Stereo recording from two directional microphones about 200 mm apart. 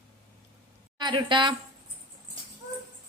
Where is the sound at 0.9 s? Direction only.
25° right (ahead or behind).